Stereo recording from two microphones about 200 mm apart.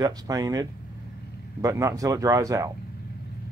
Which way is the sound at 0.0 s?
20° right (ahead or behind).